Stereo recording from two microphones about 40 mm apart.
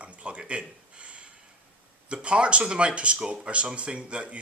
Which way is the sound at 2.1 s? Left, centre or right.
Right.